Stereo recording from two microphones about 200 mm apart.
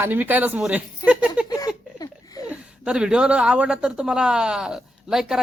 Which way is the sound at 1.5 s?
20° left (ahead or behind).